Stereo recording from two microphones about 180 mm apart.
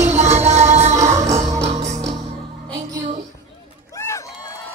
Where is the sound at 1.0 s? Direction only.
15° right (ahead or behind).